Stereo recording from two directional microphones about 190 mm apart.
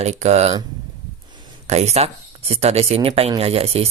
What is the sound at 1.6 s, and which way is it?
Speech, 35° right (ahead or behind).